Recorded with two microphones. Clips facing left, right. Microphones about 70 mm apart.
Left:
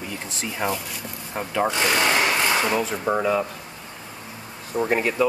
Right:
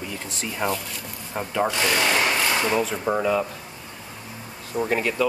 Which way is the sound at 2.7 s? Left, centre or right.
Centre.